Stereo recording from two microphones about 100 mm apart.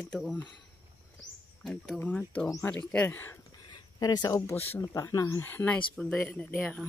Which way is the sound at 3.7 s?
45° left (ahead or behind).